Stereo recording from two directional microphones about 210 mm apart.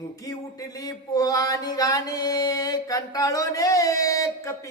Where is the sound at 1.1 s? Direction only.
15° left (ahead or behind).